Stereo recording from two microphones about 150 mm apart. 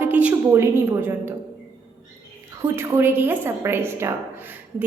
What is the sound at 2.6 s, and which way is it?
A woman's voice, 20° right (ahead or behind).